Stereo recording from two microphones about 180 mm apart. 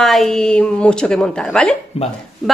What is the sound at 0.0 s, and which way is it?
A woman's voice, centre (ahead or behind).